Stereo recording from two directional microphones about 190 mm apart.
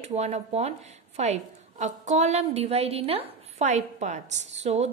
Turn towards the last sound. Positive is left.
turn(degrees=-35)  # may be behind; listen again after turning